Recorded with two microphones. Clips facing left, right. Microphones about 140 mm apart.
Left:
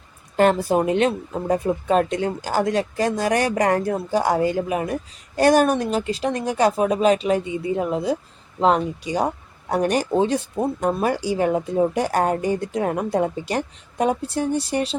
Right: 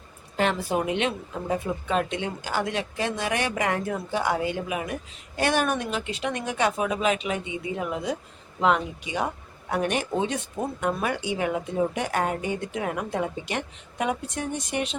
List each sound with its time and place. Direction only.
0.3 s speech: 40° left (ahead or behind)